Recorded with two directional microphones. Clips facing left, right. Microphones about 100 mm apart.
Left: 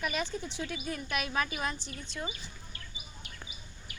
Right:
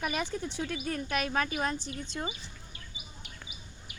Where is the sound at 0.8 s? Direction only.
45° right (ahead or behind).